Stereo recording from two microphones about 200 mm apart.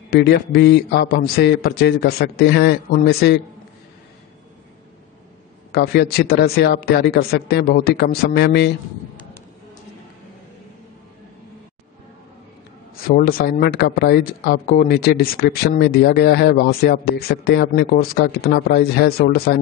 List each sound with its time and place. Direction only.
0.1 s speech: 55° left (ahead or behind)
5.7 s speech: 55° left (ahead or behind)
13.0 s speech: 45° left (ahead or behind)